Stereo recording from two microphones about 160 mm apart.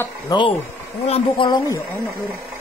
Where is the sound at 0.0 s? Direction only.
25° left (ahead or behind).